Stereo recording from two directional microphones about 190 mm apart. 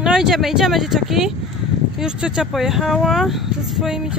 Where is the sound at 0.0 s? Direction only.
Centre (ahead or behind).